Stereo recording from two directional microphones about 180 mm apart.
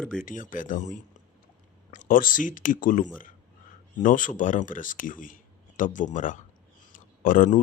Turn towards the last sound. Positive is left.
turn(degrees=50)  # may be behind; listen again after turning